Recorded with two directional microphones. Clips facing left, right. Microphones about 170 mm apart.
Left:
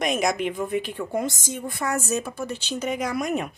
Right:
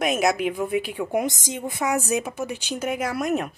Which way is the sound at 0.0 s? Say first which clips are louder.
Right 2 dB; 5° right (ahead or behind).